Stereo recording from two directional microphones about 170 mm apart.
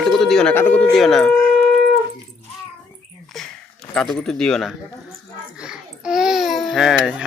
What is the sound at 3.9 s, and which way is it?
Speech, centre (ahead or behind).